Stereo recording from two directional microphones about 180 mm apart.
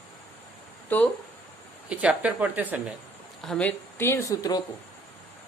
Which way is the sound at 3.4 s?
5° left (ahead or behind).